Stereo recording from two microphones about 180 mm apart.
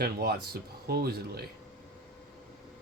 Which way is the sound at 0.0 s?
60° right (ahead or behind).